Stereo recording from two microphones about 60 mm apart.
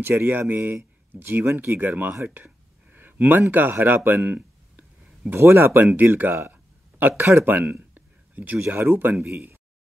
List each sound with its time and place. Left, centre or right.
0.0 s speech: right
2.2 s a sound: right
5.3 s speech: right
5.9 s speech: right
6.5 s a sound: right
7.2 s speech: right
7.5 s speech: right